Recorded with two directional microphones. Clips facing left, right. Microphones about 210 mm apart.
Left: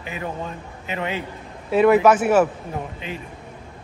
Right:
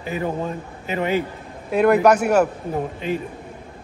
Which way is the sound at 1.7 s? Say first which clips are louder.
Even; centre (ahead or behind).